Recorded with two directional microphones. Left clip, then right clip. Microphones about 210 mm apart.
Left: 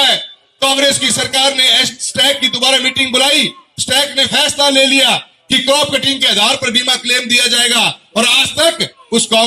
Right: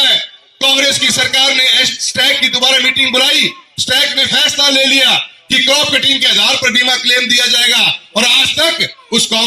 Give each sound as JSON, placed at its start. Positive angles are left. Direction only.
{"t": 0.6, "sound": "a man's voice", "side_deg": -45}